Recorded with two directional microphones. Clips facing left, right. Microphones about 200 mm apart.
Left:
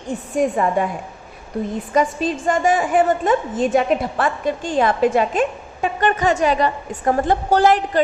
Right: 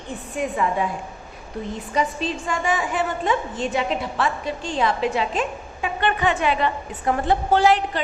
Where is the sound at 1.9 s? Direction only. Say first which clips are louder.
Left 5 dB; 50° left (ahead or behind).